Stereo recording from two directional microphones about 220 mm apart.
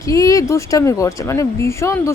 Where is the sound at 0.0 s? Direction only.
15° left (ahead or behind).